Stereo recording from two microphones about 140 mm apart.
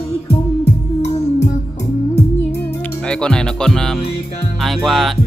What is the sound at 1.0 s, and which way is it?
Music, 55° left (ahead or behind).